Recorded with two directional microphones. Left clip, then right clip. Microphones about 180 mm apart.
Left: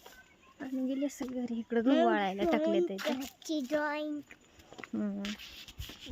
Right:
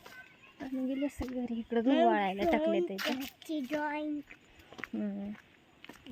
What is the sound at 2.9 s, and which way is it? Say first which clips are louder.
Speech: even; 20° right (ahead or behind).